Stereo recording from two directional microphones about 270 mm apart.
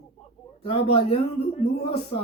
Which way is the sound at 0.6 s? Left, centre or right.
Left.